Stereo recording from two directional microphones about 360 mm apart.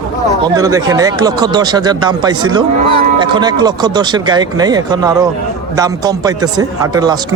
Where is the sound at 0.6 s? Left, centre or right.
Centre.